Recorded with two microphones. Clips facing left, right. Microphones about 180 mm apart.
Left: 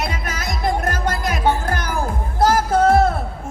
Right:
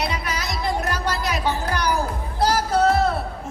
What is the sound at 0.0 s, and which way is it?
Music, 50° left (ahead or behind).